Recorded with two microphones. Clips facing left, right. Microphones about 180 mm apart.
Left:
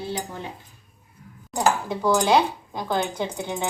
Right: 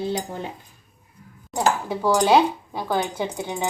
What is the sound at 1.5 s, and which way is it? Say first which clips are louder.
Speech: even; 10° right (ahead or behind).